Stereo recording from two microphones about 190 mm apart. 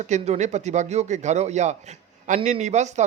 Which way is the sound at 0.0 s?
40° right (ahead or behind).